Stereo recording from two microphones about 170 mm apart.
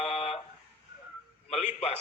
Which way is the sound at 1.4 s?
40° left (ahead or behind).